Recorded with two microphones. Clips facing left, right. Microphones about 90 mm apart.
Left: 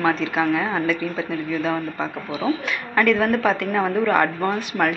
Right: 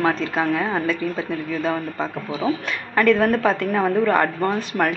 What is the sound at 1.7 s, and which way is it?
Speech, centre (ahead or behind).